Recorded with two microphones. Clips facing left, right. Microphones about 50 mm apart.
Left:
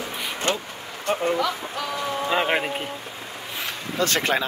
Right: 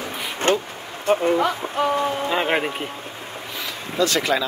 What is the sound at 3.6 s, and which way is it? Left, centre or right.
Vehicle, left.